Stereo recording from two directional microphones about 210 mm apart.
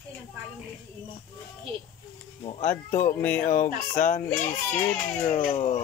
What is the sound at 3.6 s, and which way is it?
Fowl, 40° left (ahead or behind).